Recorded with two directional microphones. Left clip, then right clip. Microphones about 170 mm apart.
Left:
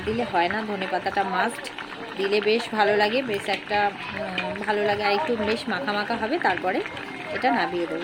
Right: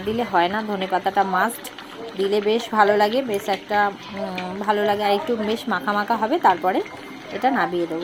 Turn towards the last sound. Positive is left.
turn(degrees=-10)  # may be behind; listen again after turning